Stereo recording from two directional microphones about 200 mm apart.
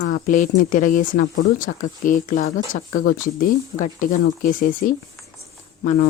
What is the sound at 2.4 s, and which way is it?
Speech, 90° left.